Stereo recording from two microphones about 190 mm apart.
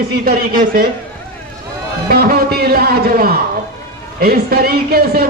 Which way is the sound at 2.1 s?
50° right (ahead or behind).